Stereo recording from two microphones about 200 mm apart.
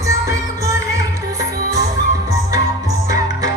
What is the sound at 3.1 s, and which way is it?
Music, 15° right (ahead or behind).